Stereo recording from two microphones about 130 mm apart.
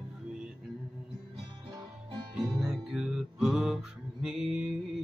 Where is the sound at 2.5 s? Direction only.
5° right (ahead or behind).